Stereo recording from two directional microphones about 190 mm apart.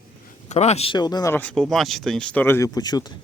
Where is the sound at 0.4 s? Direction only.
35° left (ahead or behind).